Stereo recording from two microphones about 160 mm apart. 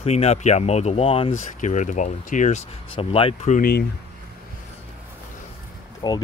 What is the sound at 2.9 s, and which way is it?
Speech, 35° left (ahead or behind).